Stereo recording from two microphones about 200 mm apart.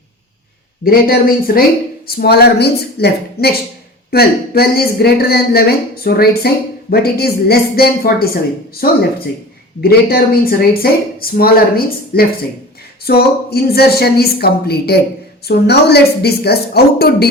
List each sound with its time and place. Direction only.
0.9 s a woman's voice: 50° left (ahead or behind)